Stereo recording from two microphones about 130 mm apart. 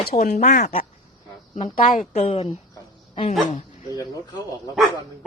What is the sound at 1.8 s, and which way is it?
Speech, 90° left.